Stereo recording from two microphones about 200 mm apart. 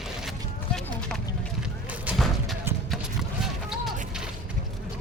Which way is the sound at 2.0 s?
Centre (ahead or behind).